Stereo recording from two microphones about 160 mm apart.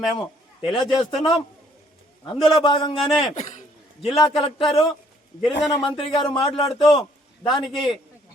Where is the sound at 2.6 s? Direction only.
30° left (ahead or behind).